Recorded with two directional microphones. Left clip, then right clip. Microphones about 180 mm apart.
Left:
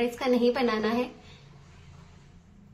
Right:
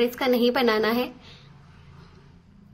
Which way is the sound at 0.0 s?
20° right (ahead or behind).